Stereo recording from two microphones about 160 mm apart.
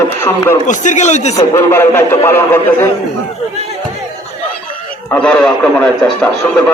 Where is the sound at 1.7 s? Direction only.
15° left (ahead or behind).